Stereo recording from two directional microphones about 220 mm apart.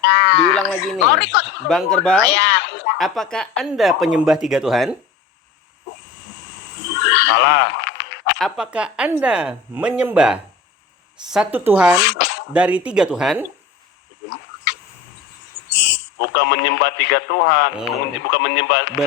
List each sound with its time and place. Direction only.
0.0 s a sound: 50° left (ahead or behind)
1.1 s speech: 50° left (ahead or behind)
1.6 s speech: centre (ahead or behind)
2.3 s a sound: 50° left (ahead or behind)
3.0 s speech: centre (ahead or behind)
6.9 s neigh: 50° left (ahead or behind)
8.4 s speech: centre (ahead or behind)
12.0 s speech: 50° left (ahead or behind)
12.5 s speech: 5° right (ahead or behind)
14.3 s a sound: 55° left (ahead or behind)
15.7 s speech: 50° left (ahead or behind)